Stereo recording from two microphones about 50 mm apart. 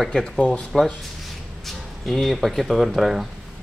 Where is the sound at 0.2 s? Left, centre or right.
Left.